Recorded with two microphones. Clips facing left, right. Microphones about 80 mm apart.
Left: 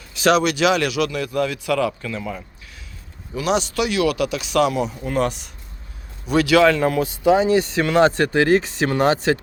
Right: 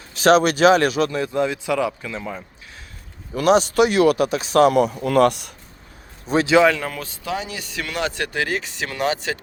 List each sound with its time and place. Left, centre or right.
0.1 s a man's voice: right; by 2.4 s centre
3.3 s speech: right
4.7 s speech: right
6.2 s a man's voice: right
6.7 s speech: centre
7.3 s speech: left